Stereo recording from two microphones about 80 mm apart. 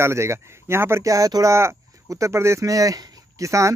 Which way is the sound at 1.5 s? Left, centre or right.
Right.